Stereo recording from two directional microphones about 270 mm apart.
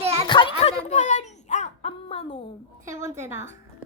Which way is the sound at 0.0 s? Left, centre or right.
Right.